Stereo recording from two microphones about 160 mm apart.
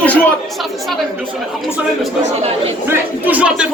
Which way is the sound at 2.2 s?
40° right (ahead or behind).